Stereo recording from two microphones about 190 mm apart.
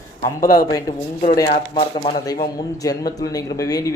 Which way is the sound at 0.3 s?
50° left (ahead or behind).